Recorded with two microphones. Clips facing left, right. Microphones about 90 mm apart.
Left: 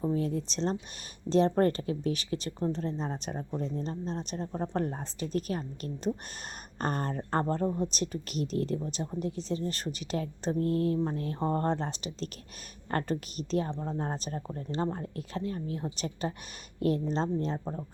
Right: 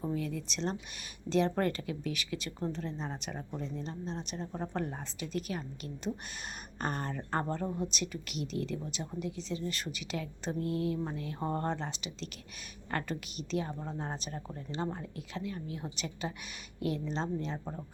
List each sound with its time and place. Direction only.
0.1 s a woman's voice: 35° left (ahead or behind)